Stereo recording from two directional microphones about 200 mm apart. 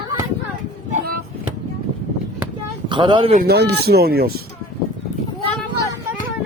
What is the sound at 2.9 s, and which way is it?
Speech, 25° right (ahead or behind).